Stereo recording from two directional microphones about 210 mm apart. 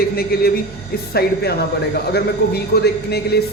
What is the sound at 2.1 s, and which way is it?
Speech, 50° left (ahead or behind).